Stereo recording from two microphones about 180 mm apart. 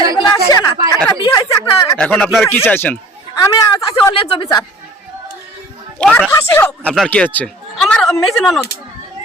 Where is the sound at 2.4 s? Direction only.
10° left (ahead or behind).